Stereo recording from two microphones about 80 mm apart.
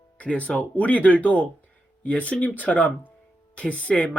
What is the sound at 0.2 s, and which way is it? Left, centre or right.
Speech, centre.